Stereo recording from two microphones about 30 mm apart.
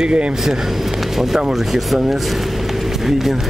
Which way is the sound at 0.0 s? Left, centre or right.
Right.